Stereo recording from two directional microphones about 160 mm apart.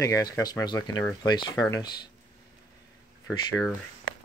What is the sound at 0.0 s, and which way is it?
Speech, 20° left (ahead or behind).